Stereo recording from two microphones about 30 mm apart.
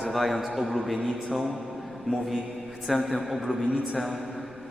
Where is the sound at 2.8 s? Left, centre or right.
Centre.